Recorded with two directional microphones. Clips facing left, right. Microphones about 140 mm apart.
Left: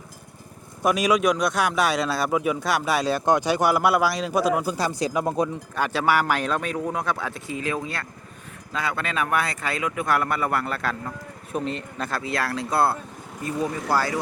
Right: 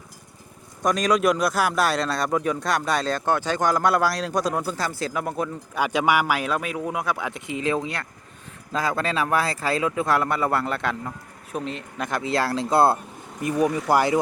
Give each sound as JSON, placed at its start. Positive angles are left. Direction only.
{"t": 0.8, "sound": "a man's voice", "side_deg": 5}
{"t": 5.7, "sound": "speech", "side_deg": -15}
{"t": 8.7, "sound": "speech", "side_deg": -35}
{"t": 11.5, "sound": "a man's voice", "side_deg": 0}
{"t": 11.9, "sound": "speech", "side_deg": -15}
{"t": 12.2, "sound": "speech", "side_deg": -25}